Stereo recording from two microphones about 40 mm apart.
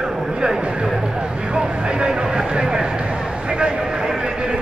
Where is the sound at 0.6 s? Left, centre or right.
Right.